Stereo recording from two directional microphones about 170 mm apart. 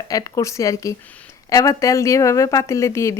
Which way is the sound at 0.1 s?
20° left (ahead or behind).